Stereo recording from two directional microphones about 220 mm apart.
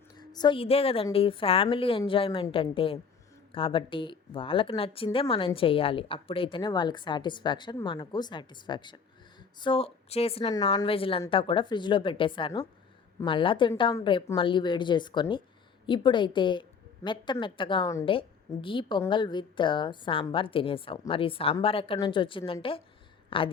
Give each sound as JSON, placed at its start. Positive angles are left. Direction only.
{"t": 0.2, "sound": "a woman's voice", "side_deg": 20}